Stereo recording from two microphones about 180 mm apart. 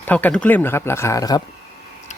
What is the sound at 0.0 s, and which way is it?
Speech, 10° left (ahead or behind).